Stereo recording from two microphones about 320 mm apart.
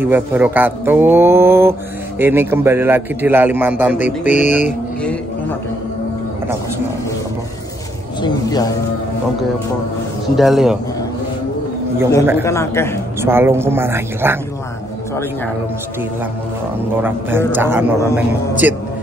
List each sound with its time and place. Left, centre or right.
0.0 s speech: centre
4.3 s music: left
8.2 s a man's voice: centre
10.3 s a man's voice: centre
12.4 s a man's voice: centre
13.2 s speech: centre
17.5 s a man's voice: centre